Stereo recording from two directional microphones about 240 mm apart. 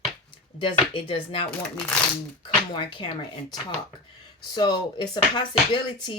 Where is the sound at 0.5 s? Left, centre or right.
Left.